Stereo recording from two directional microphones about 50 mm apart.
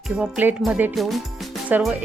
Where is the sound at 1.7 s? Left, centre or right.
Right.